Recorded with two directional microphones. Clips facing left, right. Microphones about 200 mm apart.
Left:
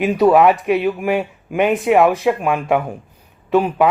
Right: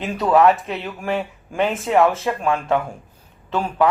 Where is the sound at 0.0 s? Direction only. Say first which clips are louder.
Left 4 dB; 15° left (ahead or behind).